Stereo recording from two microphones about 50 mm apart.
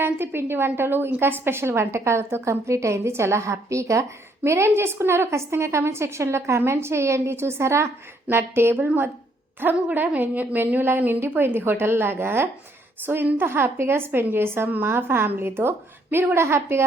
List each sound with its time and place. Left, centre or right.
0.0 s a woman's voice: right
4.4 s a woman's voice: right
8.3 s a woman's voice: right
13.1 s a woman's voice: right
13.4 s a woman's voice: right
16.3 s a woman's voice: right